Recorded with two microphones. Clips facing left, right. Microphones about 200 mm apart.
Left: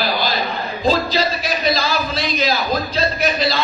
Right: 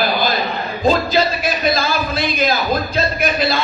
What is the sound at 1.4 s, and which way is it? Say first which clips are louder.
Speech: right 2 dB; 50° right (ahead or behind).